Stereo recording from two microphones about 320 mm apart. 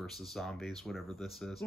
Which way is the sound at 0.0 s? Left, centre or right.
Centre.